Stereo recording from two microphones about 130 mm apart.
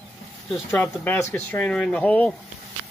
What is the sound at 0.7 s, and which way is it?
Speech, 15° left (ahead or behind).